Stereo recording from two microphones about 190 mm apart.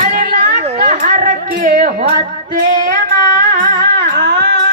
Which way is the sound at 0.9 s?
45° right (ahead or behind).